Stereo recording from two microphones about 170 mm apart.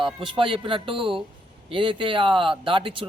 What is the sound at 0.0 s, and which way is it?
Speech, 30° right (ahead or behind).